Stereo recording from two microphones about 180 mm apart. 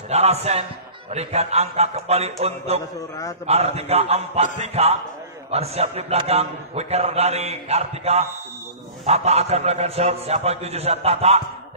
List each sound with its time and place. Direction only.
0.1 s a man's voice: 35° right (ahead or behind)